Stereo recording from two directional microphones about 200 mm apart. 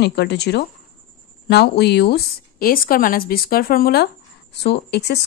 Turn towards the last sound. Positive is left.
turn(degrees=55)  # may be behind; listen again after turning